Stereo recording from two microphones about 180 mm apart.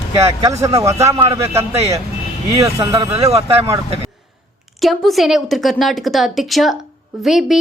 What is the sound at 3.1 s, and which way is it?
Speech, 35° right (ahead or behind).